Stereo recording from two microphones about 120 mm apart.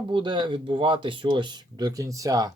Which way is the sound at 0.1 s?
40° right (ahead or behind).